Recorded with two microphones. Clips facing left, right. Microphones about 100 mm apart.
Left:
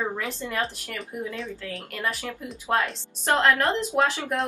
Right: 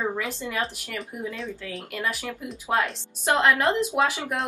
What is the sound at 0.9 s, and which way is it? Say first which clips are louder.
Speech: even; centre (ahead or behind).